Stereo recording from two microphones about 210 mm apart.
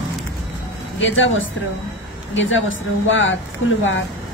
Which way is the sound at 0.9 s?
65° left (ahead or behind).